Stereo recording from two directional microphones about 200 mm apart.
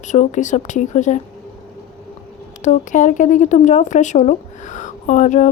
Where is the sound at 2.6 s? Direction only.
40° left (ahead or behind).